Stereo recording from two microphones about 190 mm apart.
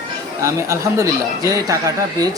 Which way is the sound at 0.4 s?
15° right (ahead or behind).